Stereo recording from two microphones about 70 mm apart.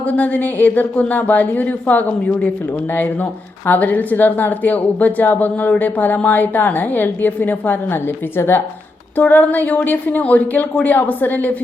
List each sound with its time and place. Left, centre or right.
0.1 s a woman's voice: left